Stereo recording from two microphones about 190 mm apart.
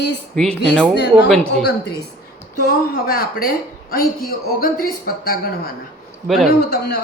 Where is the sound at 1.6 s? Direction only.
60° left (ahead or behind).